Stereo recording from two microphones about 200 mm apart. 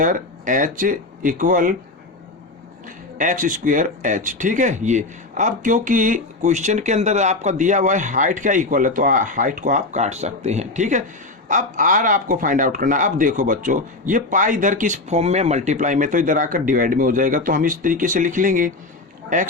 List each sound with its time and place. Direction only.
0.0 s speech: 40° right (ahead or behind)
3.2 s speech: 40° right (ahead or behind)